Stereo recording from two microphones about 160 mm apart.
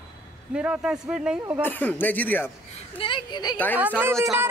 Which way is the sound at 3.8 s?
10° right (ahead or behind).